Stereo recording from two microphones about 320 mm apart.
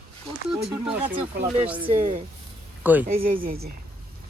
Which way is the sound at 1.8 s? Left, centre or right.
Centre.